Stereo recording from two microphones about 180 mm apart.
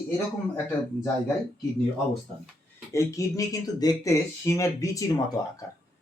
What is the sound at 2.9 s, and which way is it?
Speech, 15° left (ahead or behind).